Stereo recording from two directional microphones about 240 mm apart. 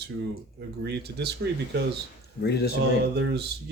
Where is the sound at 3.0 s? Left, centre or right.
Right.